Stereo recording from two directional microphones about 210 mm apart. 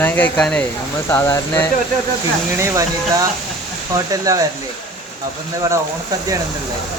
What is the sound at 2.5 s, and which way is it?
Speech, 15° right (ahead or behind).